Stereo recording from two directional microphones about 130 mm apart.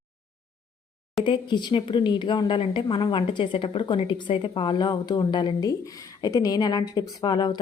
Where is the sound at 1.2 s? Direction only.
35° left (ahead or behind).